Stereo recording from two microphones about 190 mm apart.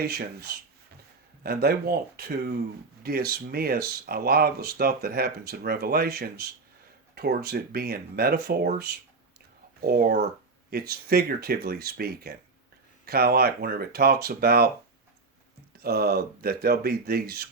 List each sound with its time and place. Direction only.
0.0 s speech: 55° right (ahead or behind)
15.8 s speech: 55° right (ahead or behind)